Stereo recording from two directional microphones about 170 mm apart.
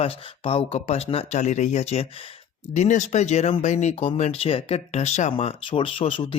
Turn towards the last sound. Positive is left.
turn(degrees=30)  # may be behind; listen again after turning